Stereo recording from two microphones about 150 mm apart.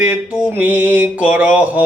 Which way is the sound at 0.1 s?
10° right (ahead or behind).